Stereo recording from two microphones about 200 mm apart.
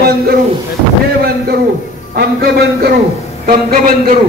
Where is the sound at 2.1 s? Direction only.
50° right (ahead or behind).